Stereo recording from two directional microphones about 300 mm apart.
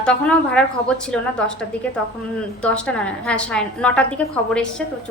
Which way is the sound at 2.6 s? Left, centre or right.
Centre.